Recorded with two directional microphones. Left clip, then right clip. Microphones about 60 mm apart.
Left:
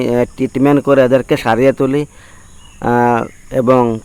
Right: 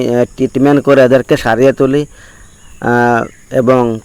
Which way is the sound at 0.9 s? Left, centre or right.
Right.